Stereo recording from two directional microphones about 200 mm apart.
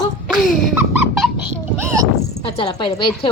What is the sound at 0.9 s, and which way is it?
Squeak, 5° right (ahead or behind).